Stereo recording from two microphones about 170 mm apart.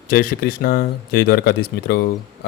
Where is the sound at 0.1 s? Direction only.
55° left (ahead or behind).